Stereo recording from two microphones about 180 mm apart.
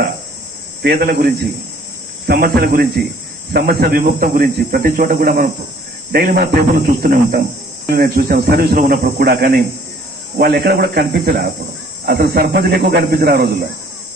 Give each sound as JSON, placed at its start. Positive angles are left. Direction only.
{"t": 0.8, "sound": "speech", "side_deg": -55}